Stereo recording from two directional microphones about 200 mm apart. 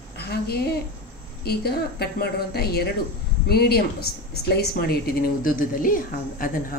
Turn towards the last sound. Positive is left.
turn(degrees=45)  # may be behind; listen again after turning